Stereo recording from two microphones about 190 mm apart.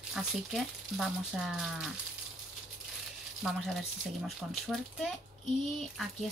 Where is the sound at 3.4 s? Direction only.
Centre (ahead or behind).